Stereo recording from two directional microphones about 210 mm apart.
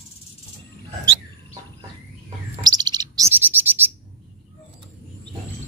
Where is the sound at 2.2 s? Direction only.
20° right (ahead or behind).